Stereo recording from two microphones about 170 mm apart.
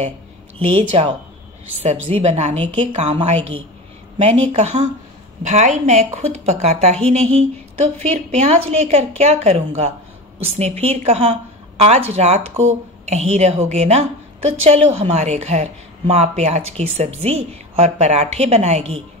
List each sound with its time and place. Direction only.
0.6 s a woman's voice: 35° right (ahead or behind)